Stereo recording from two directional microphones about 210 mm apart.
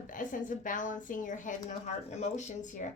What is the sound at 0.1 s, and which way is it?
A woman's voice, 40° left (ahead or behind).